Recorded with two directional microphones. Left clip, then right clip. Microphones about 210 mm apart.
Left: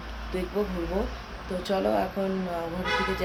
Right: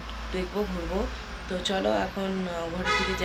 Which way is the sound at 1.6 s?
Centre (ahead or behind).